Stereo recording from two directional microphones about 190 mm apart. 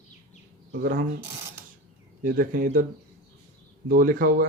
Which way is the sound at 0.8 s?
50° right (ahead or behind).